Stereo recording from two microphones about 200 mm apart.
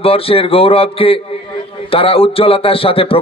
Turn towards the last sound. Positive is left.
turn(degrees=30)  # may be behind; listen again after turning